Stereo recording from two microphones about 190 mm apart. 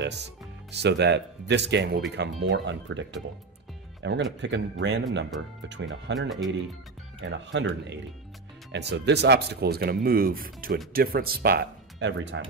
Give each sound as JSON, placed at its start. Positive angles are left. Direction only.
{"t": 0.0, "sound": "speech", "side_deg": -65}
{"t": 6.1, "sound": "speech", "side_deg": 0}
{"t": 7.2, "sound": "speech", "side_deg": -70}